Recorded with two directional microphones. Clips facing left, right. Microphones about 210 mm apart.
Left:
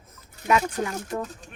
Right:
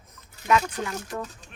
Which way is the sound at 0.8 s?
30° left (ahead or behind).